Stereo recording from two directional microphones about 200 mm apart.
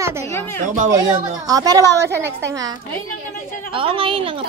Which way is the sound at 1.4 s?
20° right (ahead or behind).